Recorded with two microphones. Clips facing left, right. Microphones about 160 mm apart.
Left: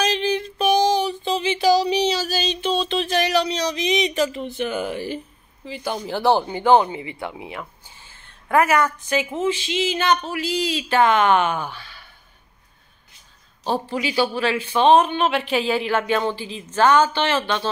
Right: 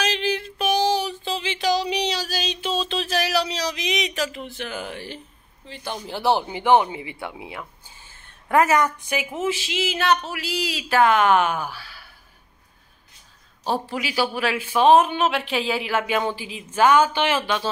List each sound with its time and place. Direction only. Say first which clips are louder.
0.1 s a sound: left 3 dB; centre (ahead or behind)
5.7 s a woman's voice: left 5 dB; centre (ahead or behind)
6.9 s speech: left 2 dB; 20° right (ahead or behind)
7.2 s speech: left 3 dB; 20° left (ahead or behind)
8.5 s a woman's voice: even; 20° right (ahead or behind); by 12.1 s 5° right (ahead or behind)
13.7 s speech: left 2 dB; 5° right (ahead or behind)